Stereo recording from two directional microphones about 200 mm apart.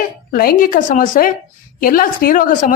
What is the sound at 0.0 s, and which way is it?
A woman's voice, 45° left (ahead or behind).